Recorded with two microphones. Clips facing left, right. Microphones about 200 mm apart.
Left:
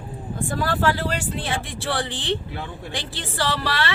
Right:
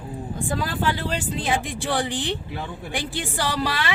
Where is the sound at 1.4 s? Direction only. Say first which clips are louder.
Right 2 dB; 15° right (ahead or behind).